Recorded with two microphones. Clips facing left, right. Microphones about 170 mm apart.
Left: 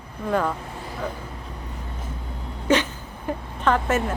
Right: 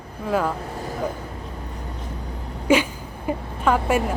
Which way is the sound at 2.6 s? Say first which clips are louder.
Right 2 dB; 10° right (ahead or behind).